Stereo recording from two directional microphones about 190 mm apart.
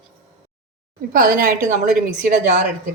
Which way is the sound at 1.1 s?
45° right (ahead or behind).